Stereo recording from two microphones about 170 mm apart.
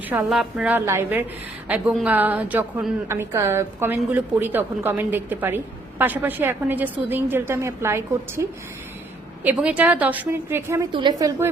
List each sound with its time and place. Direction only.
0.1 s a woman's voice: 5° right (ahead or behind)
10.9 s a woman's voice: 25° right (ahead or behind)